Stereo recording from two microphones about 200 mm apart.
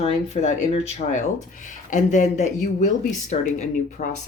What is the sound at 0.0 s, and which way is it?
Speech, 30° left (ahead or behind).